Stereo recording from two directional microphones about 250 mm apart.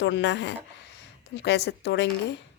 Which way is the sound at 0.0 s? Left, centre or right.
Left.